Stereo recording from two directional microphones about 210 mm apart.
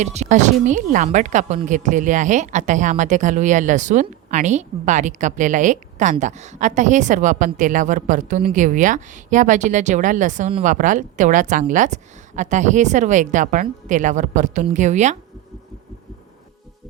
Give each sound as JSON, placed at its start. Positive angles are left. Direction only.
{"t": 0.0, "sound": "a woman's voice", "side_deg": -35}